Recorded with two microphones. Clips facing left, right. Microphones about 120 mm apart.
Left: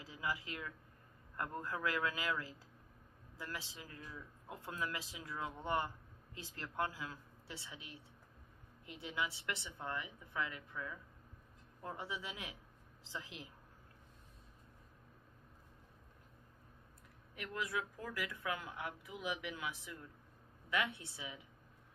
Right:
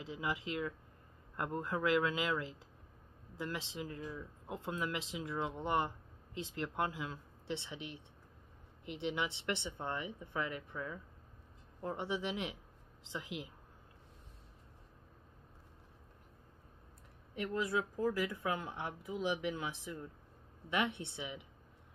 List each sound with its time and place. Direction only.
0.0 s speech: 20° right (ahead or behind)
17.4 s speech: 30° right (ahead or behind)